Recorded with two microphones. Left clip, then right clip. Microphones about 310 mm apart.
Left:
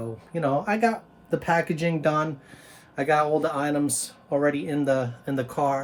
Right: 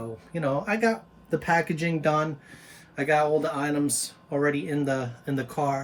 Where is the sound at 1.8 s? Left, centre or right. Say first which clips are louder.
Left 1 dB; centre.